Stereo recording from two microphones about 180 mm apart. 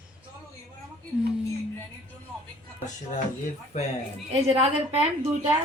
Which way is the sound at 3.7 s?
40° left (ahead or behind).